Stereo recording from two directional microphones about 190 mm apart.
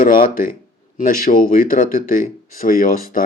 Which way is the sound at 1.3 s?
35° left (ahead or behind).